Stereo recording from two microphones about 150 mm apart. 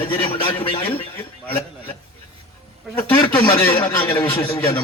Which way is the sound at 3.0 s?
10° left (ahead or behind).